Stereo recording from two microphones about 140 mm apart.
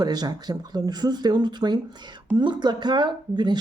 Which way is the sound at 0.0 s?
30° right (ahead or behind).